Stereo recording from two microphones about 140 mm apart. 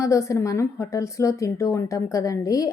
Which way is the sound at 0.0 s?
20° left (ahead or behind).